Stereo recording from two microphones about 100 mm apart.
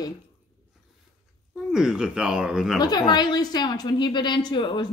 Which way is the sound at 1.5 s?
5° right (ahead or behind).